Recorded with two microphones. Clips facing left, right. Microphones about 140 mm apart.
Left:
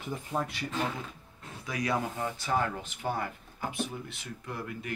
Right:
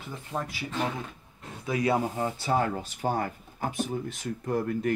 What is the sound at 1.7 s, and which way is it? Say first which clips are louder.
Speech: right 5 dB; 25° right (ahead or behind).